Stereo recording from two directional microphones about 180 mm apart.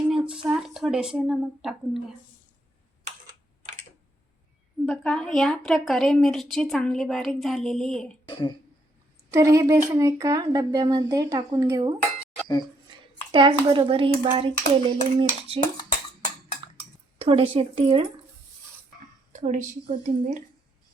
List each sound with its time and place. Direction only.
0.4 s a woman's voice: 5° right (ahead or behind)
4.9 s a woman's voice: 5° left (ahead or behind)
8.3 s speech: 25° left (ahead or behind)
9.3 s speech: 15° right (ahead or behind)
13.3 s speech: 30° right (ahead or behind)
17.2 s speech: 30° right (ahead or behind)
19.3 s speech: 45° right (ahead or behind)